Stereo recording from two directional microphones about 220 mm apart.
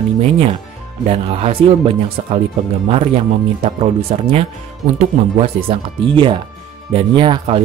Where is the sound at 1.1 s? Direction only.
25° right (ahead or behind).